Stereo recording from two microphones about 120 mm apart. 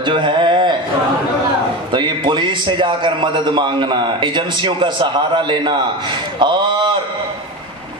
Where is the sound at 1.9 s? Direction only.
40° right (ahead or behind).